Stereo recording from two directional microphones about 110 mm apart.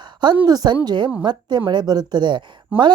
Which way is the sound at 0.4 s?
40° right (ahead or behind).